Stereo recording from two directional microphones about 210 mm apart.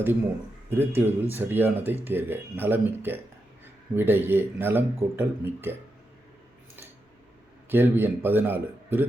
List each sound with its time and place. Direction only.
0.7 s speech: 10° right (ahead or behind)
7.7 s speech: 10° right (ahead or behind)